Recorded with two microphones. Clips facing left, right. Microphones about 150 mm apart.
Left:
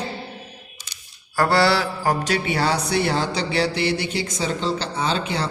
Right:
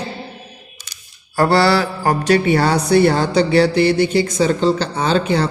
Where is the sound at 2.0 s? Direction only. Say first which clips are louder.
Right 9 dB; 60° right (ahead or behind).